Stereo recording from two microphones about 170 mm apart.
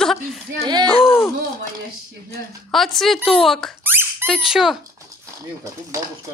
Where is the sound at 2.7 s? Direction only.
Centre (ahead or behind).